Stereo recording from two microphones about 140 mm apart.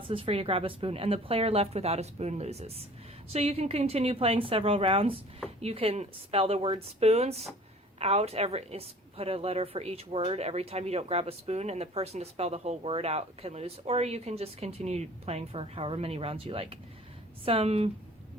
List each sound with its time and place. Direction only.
0.1 s a woman's voice: 40° right (ahead or behind)